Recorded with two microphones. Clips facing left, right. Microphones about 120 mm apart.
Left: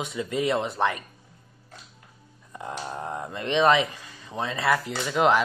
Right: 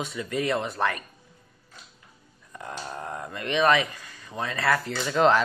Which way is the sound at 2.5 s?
20° left (ahead or behind).